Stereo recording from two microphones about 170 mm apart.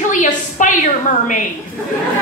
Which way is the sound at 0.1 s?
50° left (ahead or behind).